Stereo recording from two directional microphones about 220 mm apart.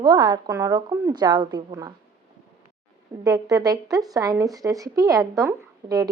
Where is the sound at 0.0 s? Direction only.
15° right (ahead or behind).